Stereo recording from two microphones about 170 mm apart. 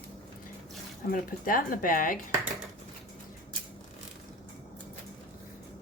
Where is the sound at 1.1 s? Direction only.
55° left (ahead or behind).